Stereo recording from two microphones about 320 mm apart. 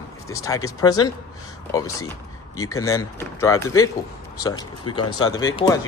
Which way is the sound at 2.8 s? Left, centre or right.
Centre.